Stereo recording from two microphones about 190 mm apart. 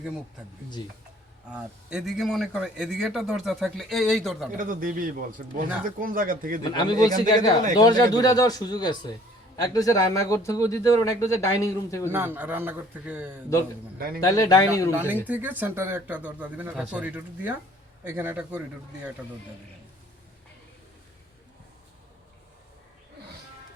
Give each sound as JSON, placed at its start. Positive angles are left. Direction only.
{"t": 1.5, "sound": "a man's voice", "side_deg": -5}
{"t": 4.5, "sound": "a man's voice", "side_deg": -45}
{"t": 6.7, "sound": "a man's voice", "side_deg": 20}
{"t": 12.1, "sound": "speech", "side_deg": -10}
{"t": 14.2, "sound": "speech", "side_deg": 20}
{"t": 15.3, "sound": "speech", "side_deg": -10}